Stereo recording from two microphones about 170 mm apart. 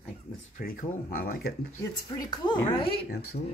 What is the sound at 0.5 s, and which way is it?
Speech, 55° left (ahead or behind).